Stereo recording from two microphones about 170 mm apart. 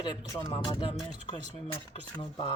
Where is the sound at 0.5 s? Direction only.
35° left (ahead or behind).